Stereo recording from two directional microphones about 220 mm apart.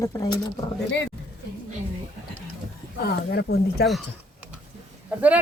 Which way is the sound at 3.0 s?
45° left (ahead or behind).